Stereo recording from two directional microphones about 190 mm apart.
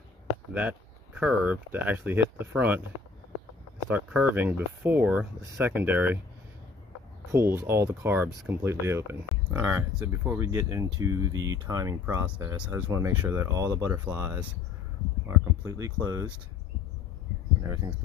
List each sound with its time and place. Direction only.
0.5 s speech: 5° right (ahead or behind)
3.9 s speech: 10° right (ahead or behind)
7.2 s speech: 15° right (ahead or behind)
17.6 s speech: 20° right (ahead or behind)